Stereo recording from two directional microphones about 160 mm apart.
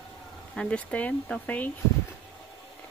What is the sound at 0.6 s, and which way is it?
Speech, 5° left (ahead or behind).